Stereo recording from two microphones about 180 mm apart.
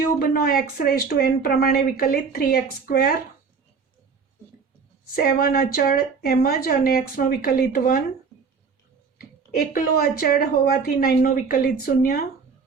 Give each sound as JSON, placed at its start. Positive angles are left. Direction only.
{"t": 0.2, "sound": "speech", "side_deg": 55}
{"t": 5.1, "sound": "speech", "side_deg": 55}
{"t": 9.1, "sound": "speech", "side_deg": 55}